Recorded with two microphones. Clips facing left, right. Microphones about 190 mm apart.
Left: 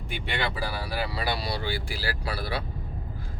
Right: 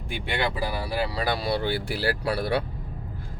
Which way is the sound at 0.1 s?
15° right (ahead or behind).